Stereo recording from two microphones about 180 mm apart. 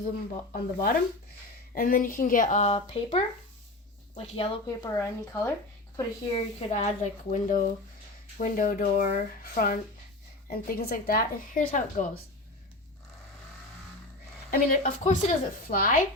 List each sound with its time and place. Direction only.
0.5 s a woman's voice: 50° left (ahead or behind)
4.4 s speech: 30° left (ahead or behind)
4.9 s speech: 15° left (ahead or behind)
6.3 s a woman's voice: 40° left (ahead or behind)
14.5 s a woman's voice: 50° left (ahead or behind)